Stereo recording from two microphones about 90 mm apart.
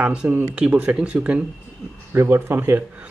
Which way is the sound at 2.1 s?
25° right (ahead or behind).